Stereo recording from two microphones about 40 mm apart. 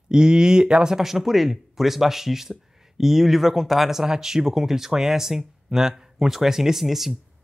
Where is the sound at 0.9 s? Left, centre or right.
Centre.